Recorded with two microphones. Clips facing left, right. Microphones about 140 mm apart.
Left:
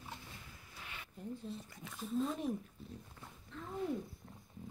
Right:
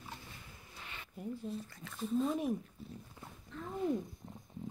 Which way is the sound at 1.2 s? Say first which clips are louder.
Right 4 dB; 10° right (ahead or behind).